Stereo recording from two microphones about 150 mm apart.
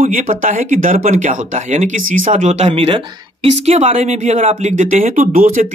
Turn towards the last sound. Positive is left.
turn(degrees=-65)  # may be behind; listen again after turning